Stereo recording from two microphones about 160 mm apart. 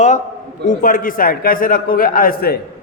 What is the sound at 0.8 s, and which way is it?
A man's voice, 60° left (ahead or behind).